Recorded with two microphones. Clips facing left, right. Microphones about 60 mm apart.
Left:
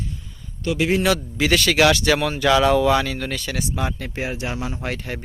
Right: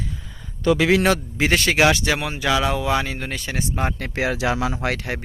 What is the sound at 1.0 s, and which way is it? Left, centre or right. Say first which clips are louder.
Speech: even; right.